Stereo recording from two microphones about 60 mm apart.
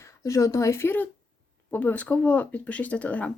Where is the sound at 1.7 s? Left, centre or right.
Left.